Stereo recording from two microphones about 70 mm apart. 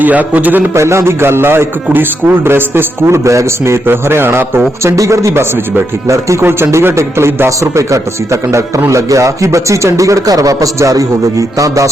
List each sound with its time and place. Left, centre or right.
0.0 s a man's voice: right
0.7 s a man's voice: right
3.8 s a man's voice: right
4.8 s speech: right